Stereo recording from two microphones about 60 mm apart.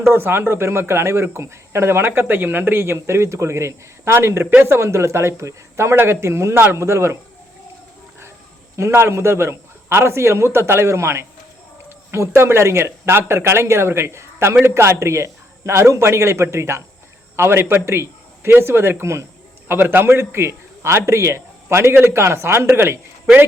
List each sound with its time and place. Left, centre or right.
0.1 s a man's voice: right
6.7 s a man's voice: right
8.7 s a man's voice: right